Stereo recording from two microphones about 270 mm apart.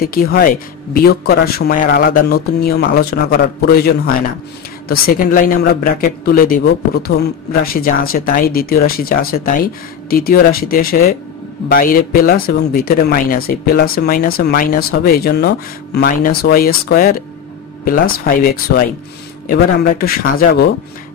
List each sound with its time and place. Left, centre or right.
0.0 s speech: left